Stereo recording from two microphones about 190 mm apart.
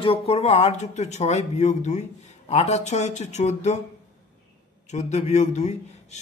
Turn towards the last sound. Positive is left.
turn(degrees=35)  # may be behind; listen again after turning